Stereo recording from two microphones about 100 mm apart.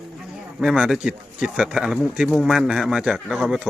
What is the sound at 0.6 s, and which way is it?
Speech, 5° right (ahead or behind).